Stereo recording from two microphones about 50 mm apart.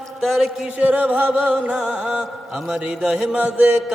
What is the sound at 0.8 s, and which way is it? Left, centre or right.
Music, right.